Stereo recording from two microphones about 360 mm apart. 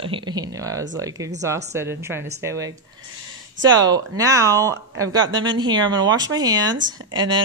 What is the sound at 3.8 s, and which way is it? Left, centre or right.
A woman's voice, centre.